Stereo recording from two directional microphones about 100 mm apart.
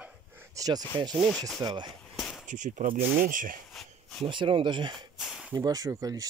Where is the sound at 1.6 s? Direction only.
50° right (ahead or behind).